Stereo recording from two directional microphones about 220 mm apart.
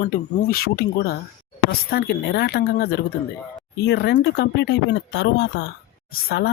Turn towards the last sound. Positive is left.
turn(degrees=45)  # may be behind; listen again after turning